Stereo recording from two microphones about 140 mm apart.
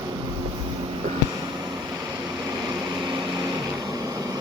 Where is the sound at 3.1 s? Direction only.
25° right (ahead or behind).